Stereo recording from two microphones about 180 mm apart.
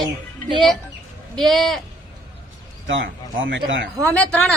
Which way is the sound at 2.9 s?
90° right.